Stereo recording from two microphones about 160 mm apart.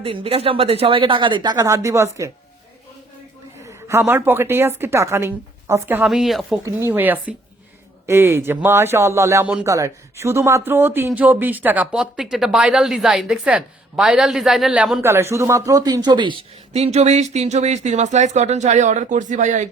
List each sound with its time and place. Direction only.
0.0 s speech: 35° right (ahead or behind); by 2.3 s 20° right (ahead or behind)
3.8 s speech: 15° right (ahead or behind)
6.7 s speech: 15° right (ahead or behind)
15.0 s speech: 15° right (ahead or behind)
16.7 s speech: 40° right (ahead or behind)